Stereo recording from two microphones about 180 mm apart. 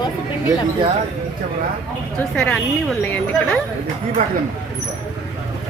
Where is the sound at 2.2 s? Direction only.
5° left (ahead or behind).